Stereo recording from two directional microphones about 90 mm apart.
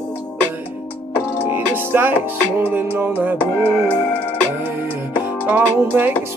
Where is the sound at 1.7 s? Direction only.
20° right (ahead or behind).